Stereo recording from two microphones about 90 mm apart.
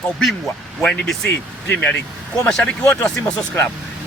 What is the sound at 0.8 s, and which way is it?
Speech, 5° left (ahead or behind).